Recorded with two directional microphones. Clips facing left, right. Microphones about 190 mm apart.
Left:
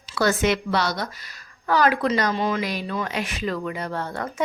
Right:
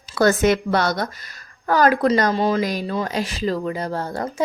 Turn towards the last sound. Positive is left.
turn(degrees=-35)  # may be behind; listen again after turning